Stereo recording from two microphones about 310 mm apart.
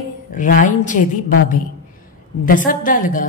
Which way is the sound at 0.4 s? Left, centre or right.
Left.